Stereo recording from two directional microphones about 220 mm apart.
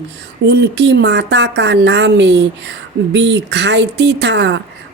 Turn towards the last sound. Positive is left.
turn(degrees=-55)  # may be behind; listen again after turning